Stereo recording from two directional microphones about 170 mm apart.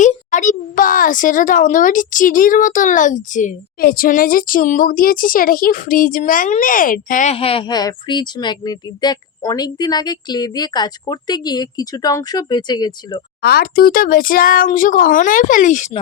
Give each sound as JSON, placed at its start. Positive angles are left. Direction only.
{"t": 0.0, "sound": "a child's voice", "side_deg": 45}
{"t": 7.3, "sound": "a woman's voice", "side_deg": 35}
{"t": 13.4, "sound": "speech", "side_deg": 65}